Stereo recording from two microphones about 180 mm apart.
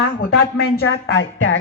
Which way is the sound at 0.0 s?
80° left.